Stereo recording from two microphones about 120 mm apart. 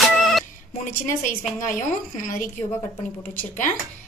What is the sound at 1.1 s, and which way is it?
Speech, 90° left.